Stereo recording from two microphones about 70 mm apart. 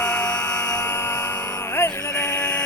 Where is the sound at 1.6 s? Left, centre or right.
Left.